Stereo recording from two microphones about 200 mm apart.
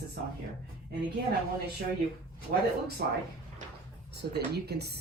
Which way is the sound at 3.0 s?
50° right (ahead or behind).